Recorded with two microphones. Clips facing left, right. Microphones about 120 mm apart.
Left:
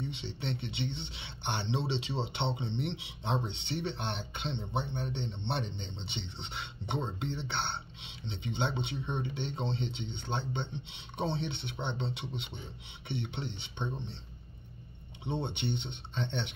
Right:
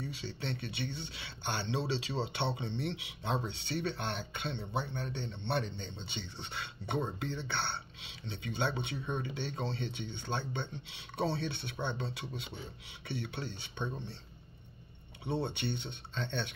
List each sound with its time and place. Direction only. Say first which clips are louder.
0.0 s speech: left 2 dB; 25° left (ahead or behind)
15.2 s speech: even; 20° left (ahead or behind)